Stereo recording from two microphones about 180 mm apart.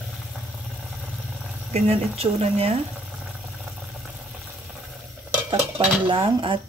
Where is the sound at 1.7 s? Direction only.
35° right (ahead or behind).